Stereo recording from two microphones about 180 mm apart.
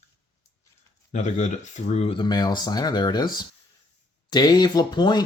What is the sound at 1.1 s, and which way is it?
Speech, 40° left (ahead or behind).